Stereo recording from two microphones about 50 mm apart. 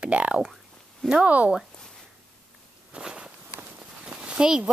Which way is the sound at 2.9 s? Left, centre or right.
Centre.